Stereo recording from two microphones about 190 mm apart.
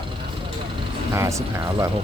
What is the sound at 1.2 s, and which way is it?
Speech, 15° right (ahead or behind).